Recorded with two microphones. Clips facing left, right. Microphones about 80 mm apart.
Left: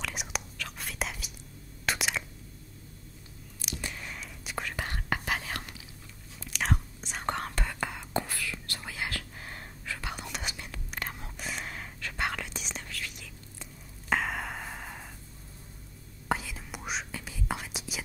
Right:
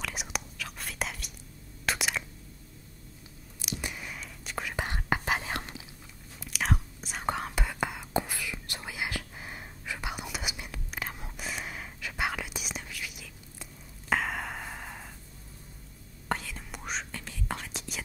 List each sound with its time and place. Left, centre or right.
0.0 s whispering: centre
1.9 s a sound: centre
3.8 s whispering: centre
4.7 s whispering: centre
6.4 s whispering: centre
16.3 s whispering: centre